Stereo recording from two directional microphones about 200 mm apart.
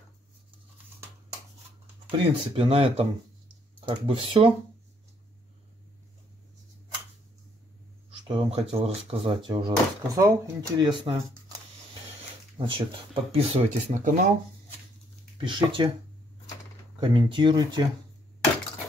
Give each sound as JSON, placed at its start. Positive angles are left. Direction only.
{"t": 2.0, "sound": "speech", "side_deg": -25}
{"t": 8.3, "sound": "speech", "side_deg": -30}
{"t": 12.5, "sound": "speech", "side_deg": -25}
{"t": 15.3, "sound": "speech", "side_deg": -25}
{"t": 17.0, "sound": "speech", "side_deg": -25}